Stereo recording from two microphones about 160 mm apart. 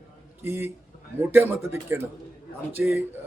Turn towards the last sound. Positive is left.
turn(degrees=-15)  # may be behind; listen again after turning